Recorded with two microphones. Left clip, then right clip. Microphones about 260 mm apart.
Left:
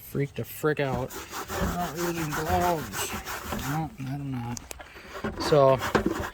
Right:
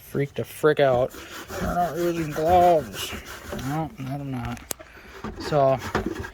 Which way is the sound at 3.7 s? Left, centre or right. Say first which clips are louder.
Right 3 dB; centre.